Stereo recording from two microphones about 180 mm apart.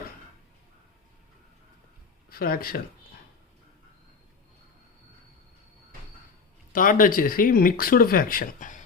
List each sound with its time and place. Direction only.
2.3 s speech: 55° left (ahead or behind)
6.7 s speech: 50° left (ahead or behind)